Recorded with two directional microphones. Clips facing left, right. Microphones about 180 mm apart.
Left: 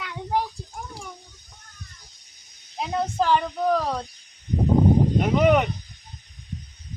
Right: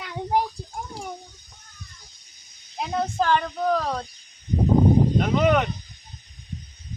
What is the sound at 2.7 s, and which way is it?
Speech, 5° left (ahead or behind).